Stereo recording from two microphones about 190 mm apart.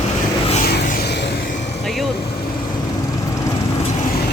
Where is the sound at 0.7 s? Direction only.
60° left (ahead or behind).